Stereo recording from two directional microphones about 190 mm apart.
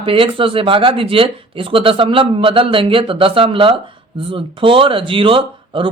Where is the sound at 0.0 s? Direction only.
30° right (ahead or behind).